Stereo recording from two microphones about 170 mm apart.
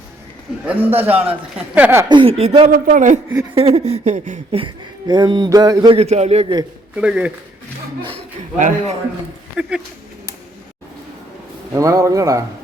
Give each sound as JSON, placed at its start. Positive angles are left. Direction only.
{"t": 0.6, "sound": "a man's voice", "side_deg": -10}
{"t": 2.0, "sound": "a sound", "side_deg": -30}
{"t": 2.6, "sound": "a man's voice", "side_deg": -55}
{"t": 3.5, "sound": "a sound", "side_deg": -35}
{"t": 4.6, "sound": "speech", "side_deg": -25}
{"t": 6.9, "sound": "a man's voice", "side_deg": -5}
{"t": 8.5, "sound": "a man's voice", "side_deg": -45}
{"t": 9.6, "sound": "speech", "side_deg": -5}
{"t": 11.7, "sound": "speech", "side_deg": -20}